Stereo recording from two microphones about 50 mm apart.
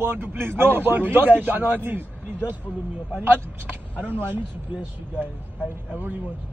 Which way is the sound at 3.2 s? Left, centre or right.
Right.